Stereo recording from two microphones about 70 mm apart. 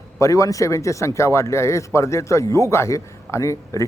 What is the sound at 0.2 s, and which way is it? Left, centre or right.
A man's voice, left.